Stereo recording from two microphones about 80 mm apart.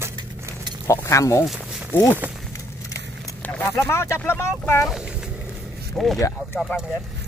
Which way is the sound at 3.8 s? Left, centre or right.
Left.